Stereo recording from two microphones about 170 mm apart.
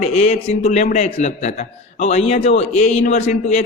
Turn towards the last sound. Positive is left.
turn(degrees=40)  # may be behind; listen again after turning